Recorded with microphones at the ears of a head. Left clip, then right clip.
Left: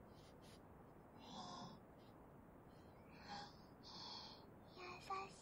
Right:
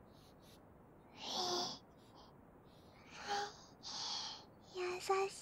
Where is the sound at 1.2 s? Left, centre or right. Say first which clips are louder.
Right 15 dB; right.